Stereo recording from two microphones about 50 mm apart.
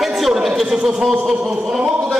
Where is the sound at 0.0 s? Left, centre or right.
Centre.